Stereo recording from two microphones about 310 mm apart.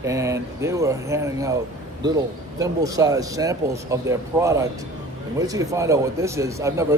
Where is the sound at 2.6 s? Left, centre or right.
Centre.